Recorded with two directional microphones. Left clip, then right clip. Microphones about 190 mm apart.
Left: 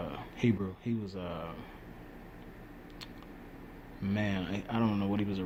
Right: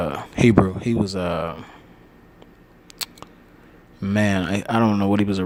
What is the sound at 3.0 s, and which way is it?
Scissors, 65° right (ahead or behind).